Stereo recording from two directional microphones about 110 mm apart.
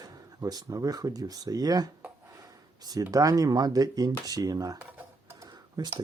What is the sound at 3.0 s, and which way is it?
Speech, 30° right (ahead or behind).